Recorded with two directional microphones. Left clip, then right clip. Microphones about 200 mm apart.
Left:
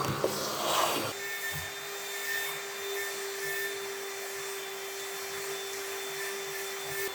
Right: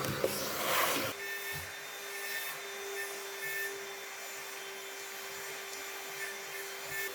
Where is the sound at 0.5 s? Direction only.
20° right (ahead or behind).